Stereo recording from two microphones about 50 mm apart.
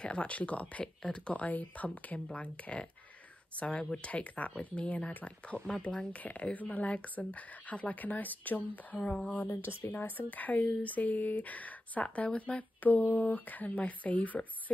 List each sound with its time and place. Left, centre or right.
0.0 s speech: left
9.6 s speech: left
9.9 s speech: left